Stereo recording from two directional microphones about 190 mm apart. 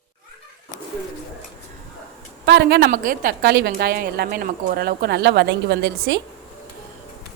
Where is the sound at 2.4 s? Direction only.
65° right (ahead or behind).